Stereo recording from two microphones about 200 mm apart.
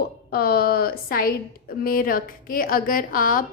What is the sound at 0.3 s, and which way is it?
A woman's voice, 50° left (ahead or behind).